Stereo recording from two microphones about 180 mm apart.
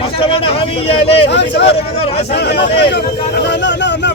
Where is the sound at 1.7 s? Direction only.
35° left (ahead or behind).